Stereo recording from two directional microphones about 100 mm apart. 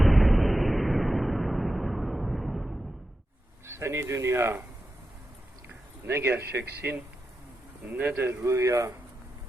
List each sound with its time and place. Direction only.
0.0 s explosion: centre (ahead or behind)
3.7 s speech: 25° right (ahead or behind)
6.1 s speech: 25° right (ahead or behind)